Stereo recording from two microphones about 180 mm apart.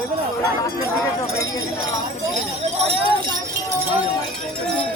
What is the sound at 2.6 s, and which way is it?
Speech, 35° right (ahead or behind).